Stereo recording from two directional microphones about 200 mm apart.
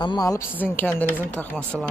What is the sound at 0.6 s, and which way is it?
Speech, 10° left (ahead or behind).